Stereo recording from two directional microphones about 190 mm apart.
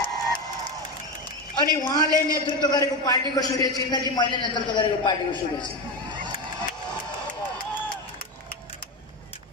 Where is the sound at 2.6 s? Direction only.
20° left (ahead or behind).